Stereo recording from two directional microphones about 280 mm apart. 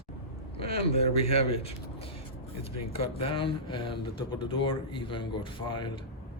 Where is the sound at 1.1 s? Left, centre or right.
Left.